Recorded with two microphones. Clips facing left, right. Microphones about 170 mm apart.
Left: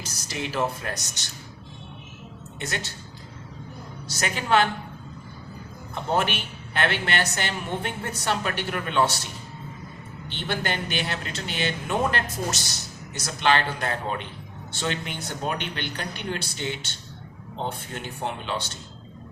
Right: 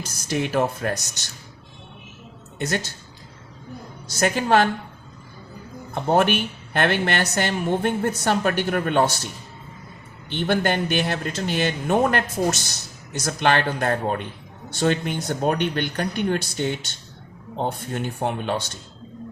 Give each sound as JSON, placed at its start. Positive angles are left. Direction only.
{"t": 0.3, "sound": "a woman's voice", "side_deg": -55}
{"t": 2.6, "sound": "a woman's voice", "side_deg": -45}
{"t": 4.2, "sound": "a woman's voice", "side_deg": -45}
{"t": 5.9, "sound": "a woman's voice", "side_deg": -55}
{"t": 10.2, "sound": "a woman's voice", "side_deg": -55}